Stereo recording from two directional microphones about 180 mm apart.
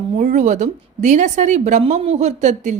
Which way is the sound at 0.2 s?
40° right (ahead or behind).